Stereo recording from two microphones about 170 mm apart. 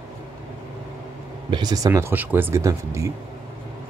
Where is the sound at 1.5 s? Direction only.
25° right (ahead or behind).